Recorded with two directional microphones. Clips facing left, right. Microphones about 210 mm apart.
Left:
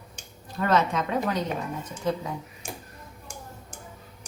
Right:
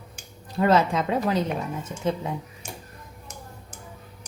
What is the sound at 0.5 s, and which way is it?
A woman's voice, 30° right (ahead or behind).